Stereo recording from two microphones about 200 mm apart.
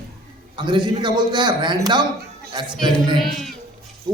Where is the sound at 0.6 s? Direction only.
20° right (ahead or behind).